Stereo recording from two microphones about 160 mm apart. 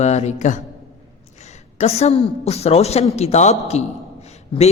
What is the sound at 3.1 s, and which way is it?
Speech, 45° left (ahead or behind).